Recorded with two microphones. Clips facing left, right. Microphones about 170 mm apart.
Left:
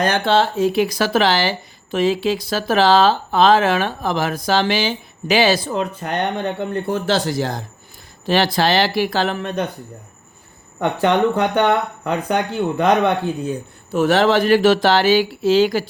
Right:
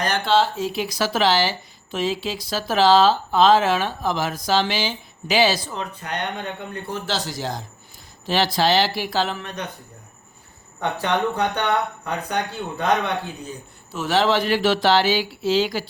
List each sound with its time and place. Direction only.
0.0 s speech: 55° left (ahead or behind)
10.8 s speech: 50° left (ahead or behind)